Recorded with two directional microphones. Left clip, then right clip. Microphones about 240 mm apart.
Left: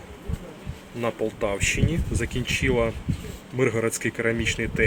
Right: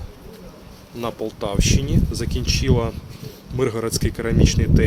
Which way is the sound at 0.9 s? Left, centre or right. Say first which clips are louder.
Even; centre.